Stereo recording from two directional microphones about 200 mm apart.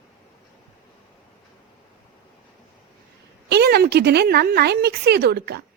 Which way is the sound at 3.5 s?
55° right (ahead or behind).